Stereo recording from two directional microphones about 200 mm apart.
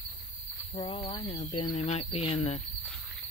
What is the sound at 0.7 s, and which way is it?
Speech, 30° left (ahead or behind).